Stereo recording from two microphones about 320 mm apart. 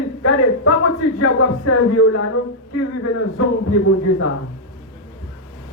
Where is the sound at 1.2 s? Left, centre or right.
Left.